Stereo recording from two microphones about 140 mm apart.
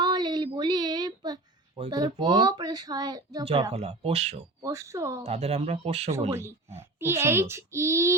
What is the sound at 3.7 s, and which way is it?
Speech, 45° right (ahead or behind).